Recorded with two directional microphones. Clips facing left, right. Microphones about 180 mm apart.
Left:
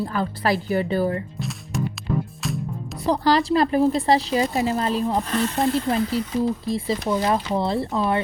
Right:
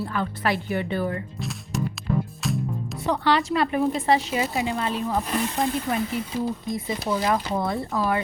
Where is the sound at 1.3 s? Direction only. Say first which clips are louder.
Left 1 dB; centre (ahead or behind).